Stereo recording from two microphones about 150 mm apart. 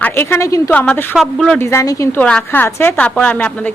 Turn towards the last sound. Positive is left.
turn(degrees=10)  # may be behind; listen again after turning